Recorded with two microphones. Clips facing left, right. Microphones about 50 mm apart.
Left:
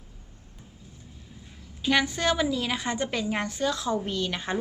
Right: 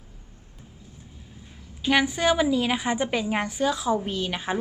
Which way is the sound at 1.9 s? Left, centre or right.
Centre.